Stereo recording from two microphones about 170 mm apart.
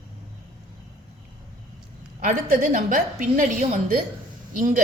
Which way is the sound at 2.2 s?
50° right (ahead or behind).